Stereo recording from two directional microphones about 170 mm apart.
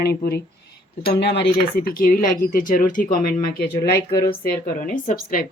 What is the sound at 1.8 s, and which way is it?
Speech, 60° left (ahead or behind).